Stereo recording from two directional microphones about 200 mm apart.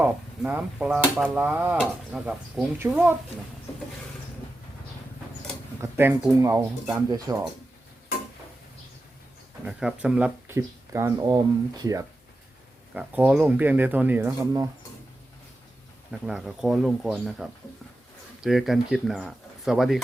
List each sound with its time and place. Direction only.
0.0 s speech: 5° right (ahead or behind)
5.8 s speech: 10° right (ahead or behind)
9.6 s speech: 5° right (ahead or behind)
16.2 s speech: centre (ahead or behind)